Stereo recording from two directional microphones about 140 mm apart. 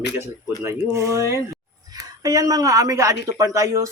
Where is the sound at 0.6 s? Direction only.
20° right (ahead or behind).